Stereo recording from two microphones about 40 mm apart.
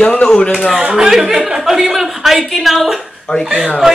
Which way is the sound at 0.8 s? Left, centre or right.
Centre.